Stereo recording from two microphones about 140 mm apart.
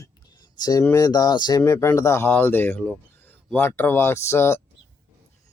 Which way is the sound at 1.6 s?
20° left (ahead or behind).